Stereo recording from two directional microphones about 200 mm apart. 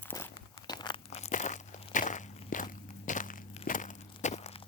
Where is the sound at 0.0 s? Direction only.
10° left (ahead or behind); by 4.0 s 40° left (ahead or behind).